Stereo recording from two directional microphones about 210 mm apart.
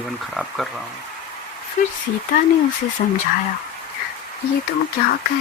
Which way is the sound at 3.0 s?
45° left (ahead or behind).